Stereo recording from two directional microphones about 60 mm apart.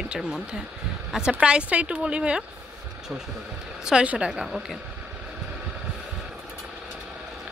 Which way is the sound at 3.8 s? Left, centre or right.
Centre.